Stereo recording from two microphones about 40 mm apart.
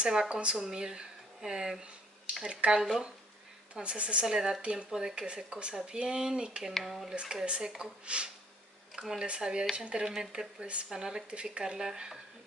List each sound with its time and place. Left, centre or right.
0.0 s speech: centre
2.7 s speech: centre
3.8 s speech: right
6.8 s speech: centre
7.1 s speech: centre
8.9 s speech: centre
9.2 s speech: right